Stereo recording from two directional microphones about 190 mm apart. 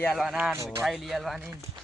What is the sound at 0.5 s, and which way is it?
Speech, 15° right (ahead or behind).